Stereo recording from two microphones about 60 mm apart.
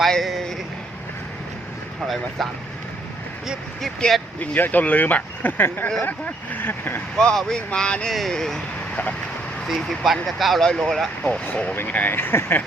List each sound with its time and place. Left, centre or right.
0.0 s speech: centre
4.0 s speech: centre
4.4 s speech: left
7.5 s speech: centre
8.1 s speech: centre
9.7 s speech: centre
11.2 s speech: left
12.1 s speech: left